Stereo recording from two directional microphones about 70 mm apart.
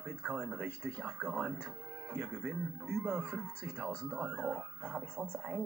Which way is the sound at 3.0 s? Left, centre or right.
Centre.